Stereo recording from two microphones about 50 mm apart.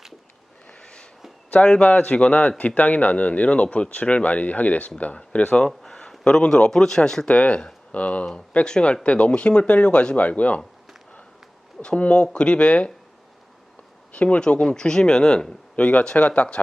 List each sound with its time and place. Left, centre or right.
0.7 s a sound: centre
1.5 s speech: left
5.6 s speech: centre
7.3 s speech: left
11.9 s speech: left
14.1 s a man's voice: left
15.7 s speech: left